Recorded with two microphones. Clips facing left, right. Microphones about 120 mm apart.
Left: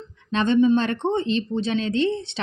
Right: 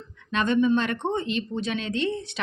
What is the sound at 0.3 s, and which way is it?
A woman's voice, 30° left (ahead or behind).